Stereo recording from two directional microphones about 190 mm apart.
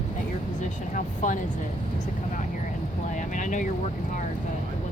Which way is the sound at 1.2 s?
40° left (ahead or behind).